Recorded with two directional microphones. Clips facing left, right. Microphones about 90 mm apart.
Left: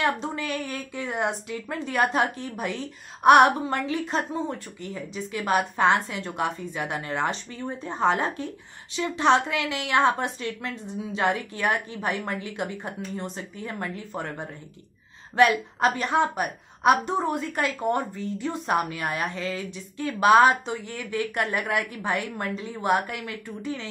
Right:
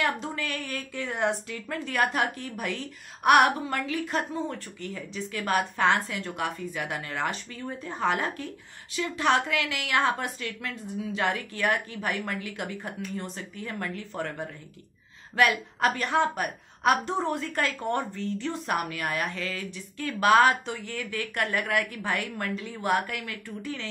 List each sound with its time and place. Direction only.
0.0 s a woman's voice: 20° left (ahead or behind)